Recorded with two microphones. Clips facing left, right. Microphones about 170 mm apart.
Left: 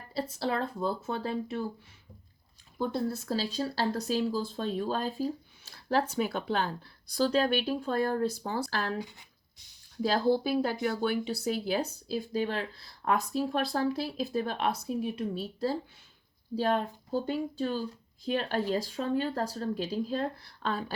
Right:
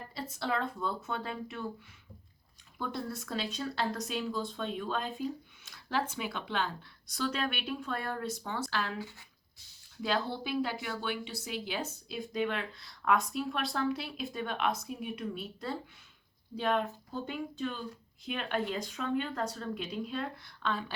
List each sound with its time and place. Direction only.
0.1 s speech: 30° left (ahead or behind)
2.7 s speech: 30° left (ahead or behind)
9.0 s speech: 15° left (ahead or behind)
10.0 s speech: 35° left (ahead or behind)